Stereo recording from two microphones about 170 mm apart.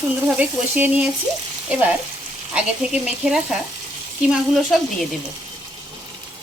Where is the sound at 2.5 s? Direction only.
5° right (ahead or behind).